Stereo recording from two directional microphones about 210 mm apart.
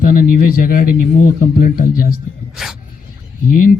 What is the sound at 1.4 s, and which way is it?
Speech, 40° left (ahead or behind).